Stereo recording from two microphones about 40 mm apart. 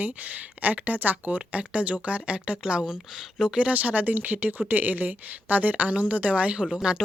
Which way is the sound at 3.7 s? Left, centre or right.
Right.